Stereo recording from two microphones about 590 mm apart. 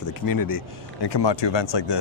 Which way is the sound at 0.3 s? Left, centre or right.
Left.